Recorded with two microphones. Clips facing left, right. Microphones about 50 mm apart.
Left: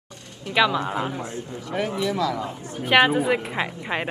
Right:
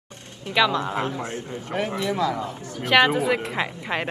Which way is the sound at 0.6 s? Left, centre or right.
Centre.